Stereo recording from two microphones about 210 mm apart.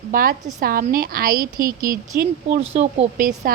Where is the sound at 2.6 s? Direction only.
30° right (ahead or behind).